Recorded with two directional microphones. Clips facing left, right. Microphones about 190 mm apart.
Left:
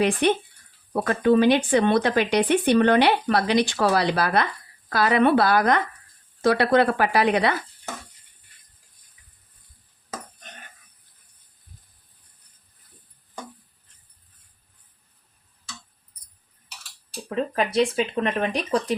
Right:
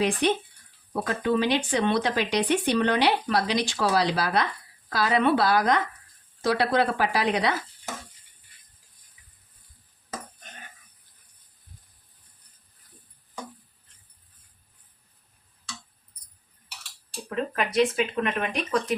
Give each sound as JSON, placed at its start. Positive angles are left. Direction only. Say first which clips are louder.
{"t": 0.0, "sound": "speech", "louder": "left 3 dB", "side_deg": 55}
{"t": 17.2, "sound": "speech", "louder": "left 3 dB", "side_deg": 30}